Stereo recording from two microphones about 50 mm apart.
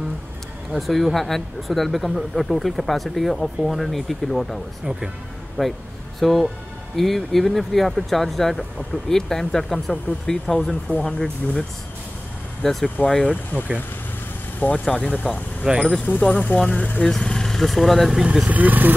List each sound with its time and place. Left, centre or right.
0.7 s speech: centre
5.6 s speech: centre
12.6 s speech: centre
13.3 s speech: left
15.7 s speech: centre
16.1 s speech: left
17.1 s speech: centre
18.2 s speech: centre
18.5 s speech: right